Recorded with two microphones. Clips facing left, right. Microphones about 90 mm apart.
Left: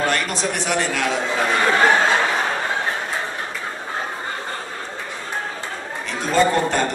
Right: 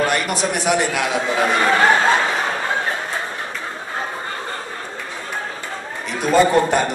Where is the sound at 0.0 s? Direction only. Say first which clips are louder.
Right 2 dB; 15° right (ahead or behind).